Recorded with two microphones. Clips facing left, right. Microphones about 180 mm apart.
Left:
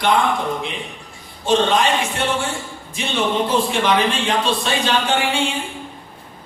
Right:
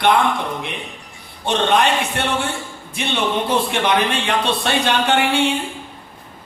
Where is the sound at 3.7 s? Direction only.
60° right (ahead or behind).